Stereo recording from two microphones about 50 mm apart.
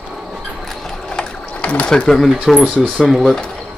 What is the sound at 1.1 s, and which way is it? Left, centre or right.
Sewing machine, left.